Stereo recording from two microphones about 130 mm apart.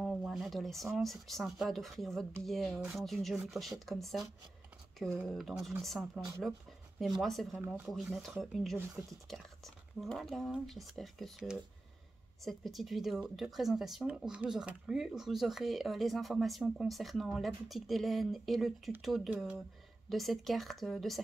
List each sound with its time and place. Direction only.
0.0 s speech: 5° right (ahead or behind)
5.3 s speech: centre (ahead or behind)
8.7 s speech: 20° right (ahead or behind)
9.3 s speech: centre (ahead or behind)